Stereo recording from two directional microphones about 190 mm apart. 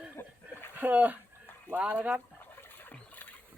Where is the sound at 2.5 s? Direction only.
10° left (ahead or behind).